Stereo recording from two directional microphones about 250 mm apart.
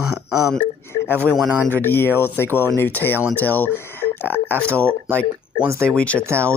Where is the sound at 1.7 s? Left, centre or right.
Centre.